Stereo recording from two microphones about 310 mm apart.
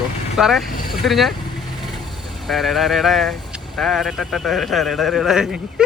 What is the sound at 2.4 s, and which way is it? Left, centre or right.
Speech, centre.